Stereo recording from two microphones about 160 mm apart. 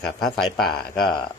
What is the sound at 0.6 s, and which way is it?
Speech, 75° left (ahead or behind).